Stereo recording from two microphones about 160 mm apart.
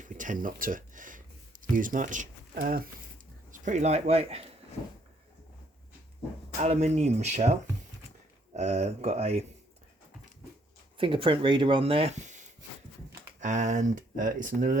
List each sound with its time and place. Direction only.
0.0 s a sound: 55° right (ahead or behind)
0.4 s speech: 60° right (ahead or behind)
3.5 s speech: 50° right (ahead or behind)
6.6 s speech: 45° right (ahead or behind)
8.5 s speech: 45° right (ahead or behind)
10.9 s speech: 35° right (ahead or behind); by 14.8 s 55° right (ahead or behind)